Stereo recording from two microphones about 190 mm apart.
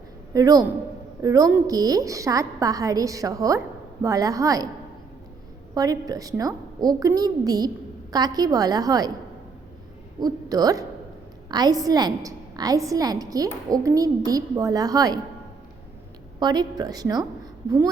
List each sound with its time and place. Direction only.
0.3 s a woman's voice: 20° right (ahead or behind)
5.7 s a woman's voice: 20° right (ahead or behind)
10.2 s a woman's voice: 20° right (ahead or behind)
16.4 s a woman's voice: 20° right (ahead or behind)